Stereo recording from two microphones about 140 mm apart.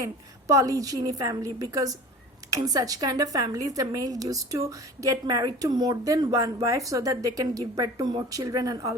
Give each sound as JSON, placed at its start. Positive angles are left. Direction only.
{"t": 0.0, "sound": "a woman's voice", "side_deg": -25}